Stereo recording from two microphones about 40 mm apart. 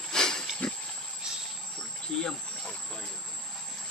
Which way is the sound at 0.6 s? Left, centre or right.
Left.